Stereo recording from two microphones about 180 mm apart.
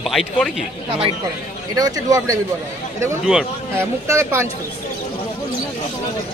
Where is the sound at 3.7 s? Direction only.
15° right (ahead or behind).